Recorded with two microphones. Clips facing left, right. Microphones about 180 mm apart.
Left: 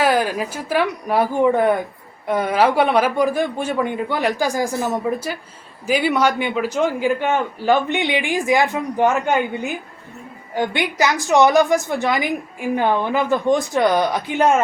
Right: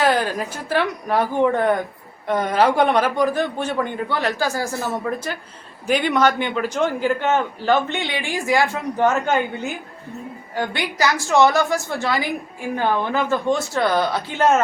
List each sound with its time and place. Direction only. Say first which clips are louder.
0.0 s a man's voice: left 1 dB; 10° left (ahead or behind)
10.5 s a man's voice: left 4 dB; 20° left (ahead or behind)